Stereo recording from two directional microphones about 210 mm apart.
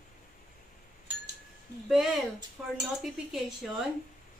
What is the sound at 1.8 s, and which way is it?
A woman's voice, centre (ahead or behind).